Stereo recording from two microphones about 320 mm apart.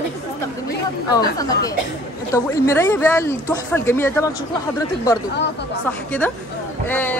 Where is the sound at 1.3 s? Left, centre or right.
Centre.